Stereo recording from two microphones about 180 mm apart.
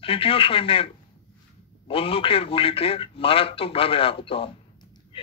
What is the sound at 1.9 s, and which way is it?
Speech, 30° left (ahead or behind).